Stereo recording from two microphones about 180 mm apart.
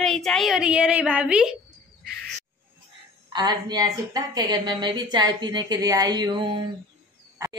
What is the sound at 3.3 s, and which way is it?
A woman's voice, 25° right (ahead or behind).